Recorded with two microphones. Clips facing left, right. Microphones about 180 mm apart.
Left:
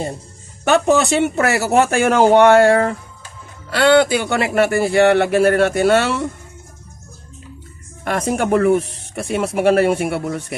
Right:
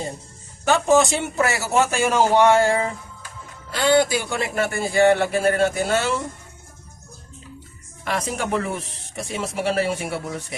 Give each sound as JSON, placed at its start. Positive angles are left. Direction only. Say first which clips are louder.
{"t": 0.6, "sound": "speech", "louder": "left 2 dB", "side_deg": 65}
{"t": 8.0, "sound": "speech", "louder": "left 6 dB", "side_deg": 50}